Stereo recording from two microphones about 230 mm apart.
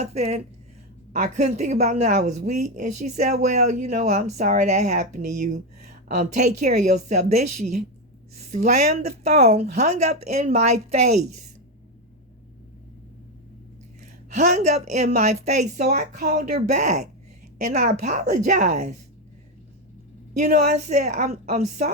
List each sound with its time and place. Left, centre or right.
0.0 s speech: right
14.0 s speech: right
20.3 s speech: right